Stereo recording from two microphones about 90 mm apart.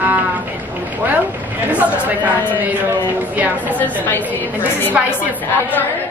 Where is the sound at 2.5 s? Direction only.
20° right (ahead or behind).